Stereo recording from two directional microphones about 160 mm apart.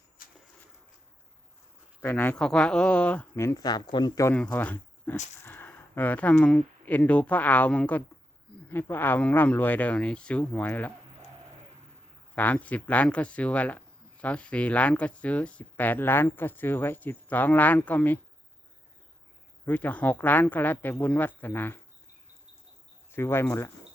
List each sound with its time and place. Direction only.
2.0 s speech: 15° left (ahead or behind)
4.4 s speech: 10° left (ahead or behind)
12.3 s speech: 10° left (ahead or behind)
19.6 s speech: 10° left (ahead or behind)
23.1 s speech: 15° left (ahead or behind)